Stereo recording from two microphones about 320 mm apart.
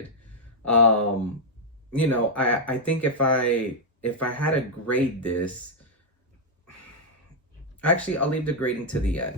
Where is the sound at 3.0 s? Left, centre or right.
Left.